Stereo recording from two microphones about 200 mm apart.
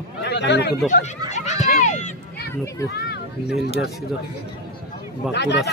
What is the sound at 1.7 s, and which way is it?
Run, 35° left (ahead or behind).